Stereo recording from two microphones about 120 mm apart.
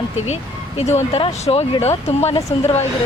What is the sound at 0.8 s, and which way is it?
Speech, 65° left (ahead or behind).